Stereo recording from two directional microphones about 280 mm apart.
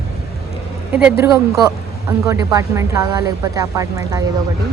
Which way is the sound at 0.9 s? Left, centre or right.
Centre.